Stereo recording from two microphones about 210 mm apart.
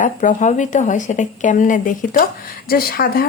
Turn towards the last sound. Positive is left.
turn(degrees=45)  # may be behind; listen again after turning